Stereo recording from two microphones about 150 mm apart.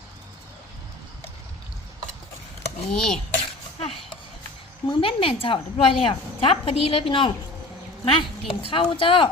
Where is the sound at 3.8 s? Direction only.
40° left (ahead or behind).